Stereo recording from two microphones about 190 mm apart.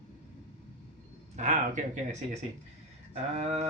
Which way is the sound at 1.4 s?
40° right (ahead or behind).